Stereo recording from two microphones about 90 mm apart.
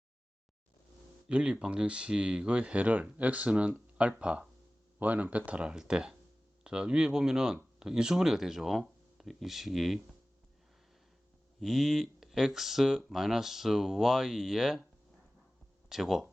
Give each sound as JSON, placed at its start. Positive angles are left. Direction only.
{"t": 1.3, "sound": "speech", "side_deg": -10}
{"t": 11.6, "sound": "speech", "side_deg": -5}
{"t": 15.9, "sound": "speech", "side_deg": -5}